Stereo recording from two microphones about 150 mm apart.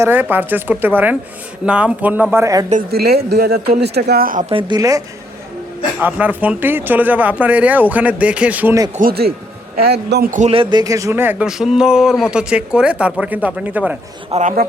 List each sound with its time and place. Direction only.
0.0 s speech: 10° right (ahead or behind)
2.9 s speech: 90° right; by 4.4 s 70° right (ahead or behind)
4.4 s speech: 35° right (ahead or behind)
4.8 s a woman's voice: 25° right (ahead or behind)
6.0 s speech: 10° right (ahead or behind)
9.0 s speech: 85° right
10.4 s speech: 35° right (ahead or behind); by 13.9 s 10° right (ahead or behind)
14.4 s speech: 80° right